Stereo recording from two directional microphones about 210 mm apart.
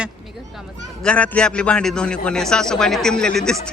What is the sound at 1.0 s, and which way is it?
A man's voice, 5° left (ahead or behind).